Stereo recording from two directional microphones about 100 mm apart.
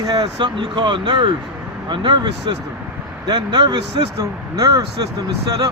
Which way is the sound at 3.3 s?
45° right (ahead or behind).